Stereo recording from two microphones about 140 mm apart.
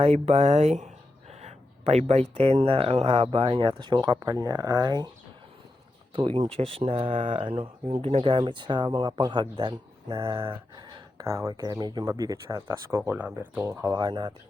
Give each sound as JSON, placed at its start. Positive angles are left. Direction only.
{"t": 0.0, "sound": "speech", "side_deg": -50}
{"t": 6.1, "sound": "speech", "side_deg": -40}